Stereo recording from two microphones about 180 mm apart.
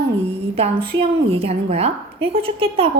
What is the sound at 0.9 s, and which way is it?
Speech, 90° right.